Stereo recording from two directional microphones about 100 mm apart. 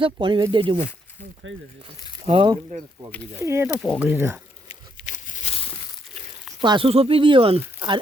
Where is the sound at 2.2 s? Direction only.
70° right (ahead or behind).